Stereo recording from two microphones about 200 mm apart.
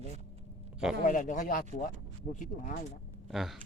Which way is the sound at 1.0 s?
40° left (ahead or behind).